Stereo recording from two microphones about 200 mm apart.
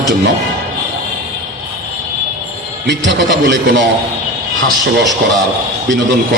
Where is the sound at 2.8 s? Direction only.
60° right (ahead or behind).